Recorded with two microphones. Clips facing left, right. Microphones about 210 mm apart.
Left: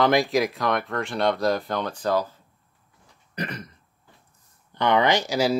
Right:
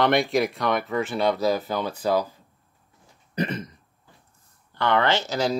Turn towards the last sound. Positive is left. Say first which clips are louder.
# left 2 dB
turn(degrees=10)  # may be behind; listen again after turning